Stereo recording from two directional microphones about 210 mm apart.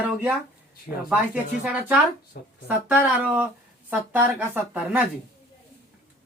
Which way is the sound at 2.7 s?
10° right (ahead or behind).